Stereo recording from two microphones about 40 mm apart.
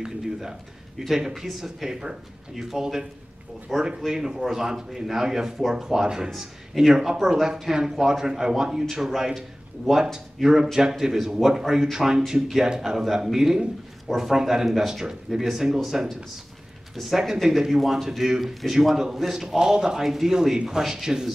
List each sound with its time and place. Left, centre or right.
0.0 s speech: centre
6.3 s a man's voice: centre